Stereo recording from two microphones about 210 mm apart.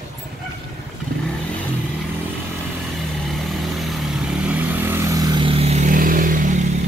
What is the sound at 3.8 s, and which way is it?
Vehicle, centre (ahead or behind).